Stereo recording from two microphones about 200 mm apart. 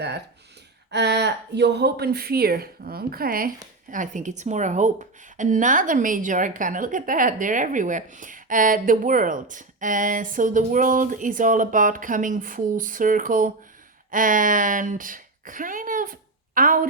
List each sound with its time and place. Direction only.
0.9 s speech: 60° right (ahead or behind)